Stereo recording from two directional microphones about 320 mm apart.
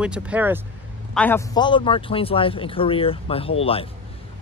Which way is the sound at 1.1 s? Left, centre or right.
Centre.